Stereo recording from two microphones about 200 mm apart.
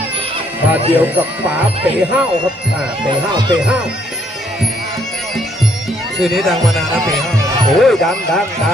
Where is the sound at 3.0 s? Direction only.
20° right (ahead or behind).